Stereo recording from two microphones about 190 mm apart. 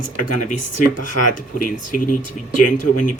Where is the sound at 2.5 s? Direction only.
45° left (ahead or behind).